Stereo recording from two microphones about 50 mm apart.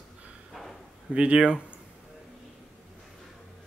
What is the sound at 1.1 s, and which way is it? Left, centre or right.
Speech, right.